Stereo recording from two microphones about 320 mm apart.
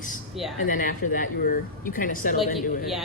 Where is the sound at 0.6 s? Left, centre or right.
Left.